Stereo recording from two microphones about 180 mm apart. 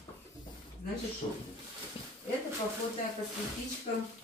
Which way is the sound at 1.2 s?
35° left (ahead or behind).